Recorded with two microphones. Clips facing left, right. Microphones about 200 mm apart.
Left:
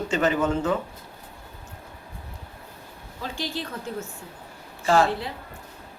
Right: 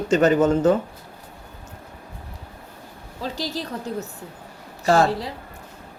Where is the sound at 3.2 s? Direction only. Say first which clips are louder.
Right 3 dB; 40° right (ahead or behind).